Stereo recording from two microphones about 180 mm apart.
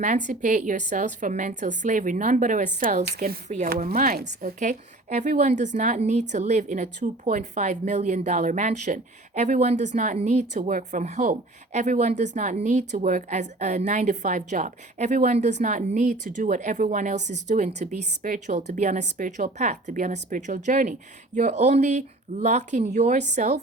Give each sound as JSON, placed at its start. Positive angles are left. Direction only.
{"t": 0.0, "sound": "a woman's voice", "side_deg": -45}
{"t": 4.3, "sound": "a woman's voice", "side_deg": -45}